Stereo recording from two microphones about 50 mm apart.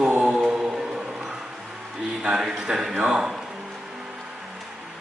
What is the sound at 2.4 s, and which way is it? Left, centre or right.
A man's voice, centre.